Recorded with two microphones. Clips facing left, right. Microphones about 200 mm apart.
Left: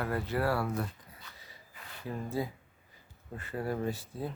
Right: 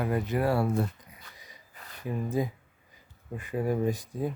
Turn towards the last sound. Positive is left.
turn(degrees=-15)  # may be behind; listen again after turning